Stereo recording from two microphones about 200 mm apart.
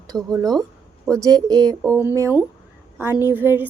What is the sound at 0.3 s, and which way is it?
Speech, 15° right (ahead or behind).